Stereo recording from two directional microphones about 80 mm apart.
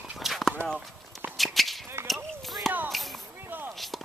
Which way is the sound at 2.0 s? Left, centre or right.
Centre.